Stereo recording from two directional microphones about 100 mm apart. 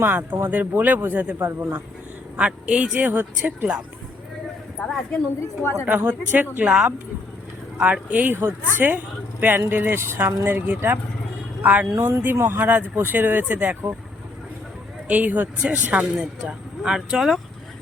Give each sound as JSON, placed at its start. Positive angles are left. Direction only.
{"t": 0.0, "sound": "speech", "side_deg": -20}
{"t": 2.3, "sound": "speech", "side_deg": -10}
{"t": 5.9, "sound": "speech", "side_deg": -20}
{"t": 6.7, "sound": "speech", "side_deg": -5}
{"t": 15.0, "sound": "speech", "side_deg": -15}